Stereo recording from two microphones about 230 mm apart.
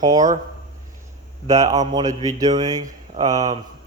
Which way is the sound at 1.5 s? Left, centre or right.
Right.